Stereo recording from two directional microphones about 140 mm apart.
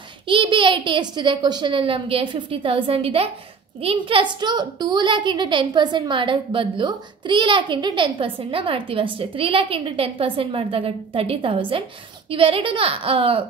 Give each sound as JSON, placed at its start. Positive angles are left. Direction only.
{"t": 0.3, "sound": "a woman's voice", "side_deg": -35}